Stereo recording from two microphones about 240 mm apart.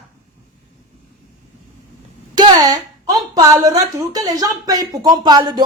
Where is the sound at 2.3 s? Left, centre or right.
Centre.